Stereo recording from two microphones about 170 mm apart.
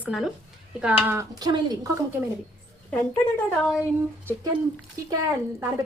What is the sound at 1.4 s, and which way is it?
Speech, 25° right (ahead or behind).